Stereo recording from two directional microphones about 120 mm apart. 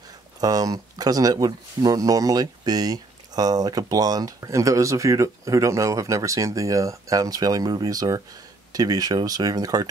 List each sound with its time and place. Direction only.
0.4 s speech: 30° right (ahead or behind)